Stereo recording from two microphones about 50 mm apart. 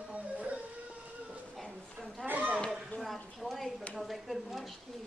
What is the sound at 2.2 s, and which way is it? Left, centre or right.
Speech, right.